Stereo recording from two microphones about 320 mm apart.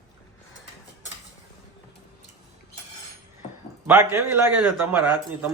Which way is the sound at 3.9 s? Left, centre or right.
Centre.